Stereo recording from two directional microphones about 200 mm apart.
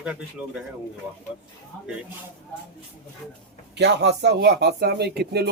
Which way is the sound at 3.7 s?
60° right (ahead or behind).